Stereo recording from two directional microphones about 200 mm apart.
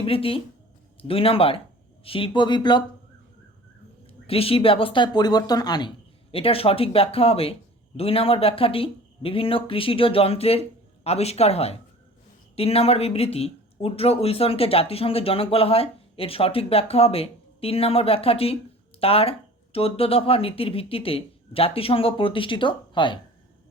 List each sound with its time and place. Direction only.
0.0 s speech: 30° left (ahead or behind)
4.3 s speech: 30° left (ahead or behind)